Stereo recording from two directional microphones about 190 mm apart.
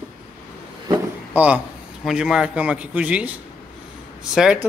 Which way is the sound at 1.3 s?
5° right (ahead or behind).